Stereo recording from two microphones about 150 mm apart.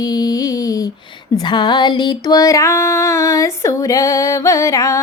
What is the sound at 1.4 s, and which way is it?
Female singing, 30° left (ahead or behind).